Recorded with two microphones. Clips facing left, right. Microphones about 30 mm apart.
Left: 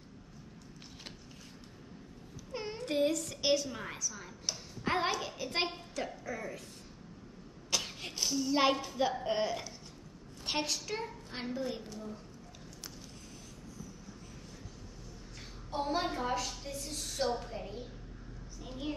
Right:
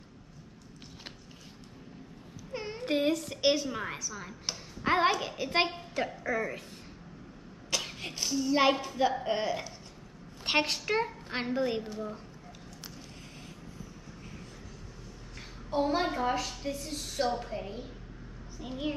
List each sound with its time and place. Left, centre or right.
2.5 s a sound: centre
2.8 s a woman's voice: right
7.8 s a woman's voice: centre
10.4 s a woman's voice: right
11.8 s a woman's voice: right
15.7 s a woman's voice: centre